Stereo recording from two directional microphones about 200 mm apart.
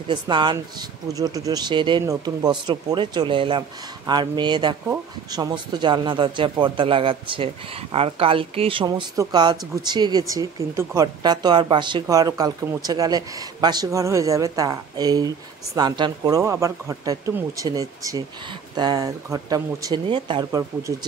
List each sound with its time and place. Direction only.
0.1 s speech: 25° right (ahead or behind)